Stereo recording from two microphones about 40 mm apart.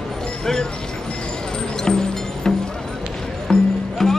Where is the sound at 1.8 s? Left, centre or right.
Centre.